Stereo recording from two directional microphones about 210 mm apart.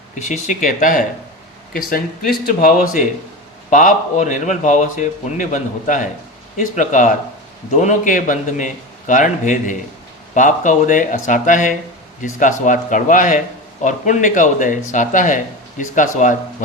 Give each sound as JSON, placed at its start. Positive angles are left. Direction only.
{"t": 0.2, "sound": "a man's voice", "side_deg": 35}
{"t": 2.5, "sound": "a man's voice", "side_deg": 40}